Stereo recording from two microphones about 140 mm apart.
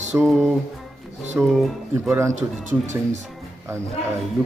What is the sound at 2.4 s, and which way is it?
Speech, 60° right (ahead or behind).